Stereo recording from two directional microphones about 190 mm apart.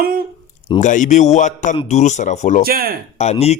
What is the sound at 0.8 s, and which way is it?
Speech, 40° left (ahead or behind).